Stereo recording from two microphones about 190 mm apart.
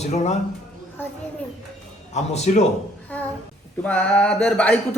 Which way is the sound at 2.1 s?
35° left (ahead or behind).